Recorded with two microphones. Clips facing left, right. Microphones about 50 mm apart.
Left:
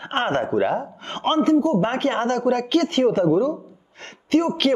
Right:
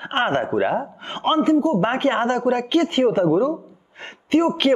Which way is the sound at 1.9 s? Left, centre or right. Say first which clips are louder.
Right 2 dB; centre.